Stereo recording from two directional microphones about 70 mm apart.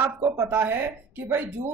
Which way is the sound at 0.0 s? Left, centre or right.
Right.